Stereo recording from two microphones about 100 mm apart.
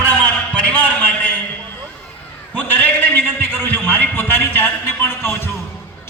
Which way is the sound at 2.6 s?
20° left (ahead or behind).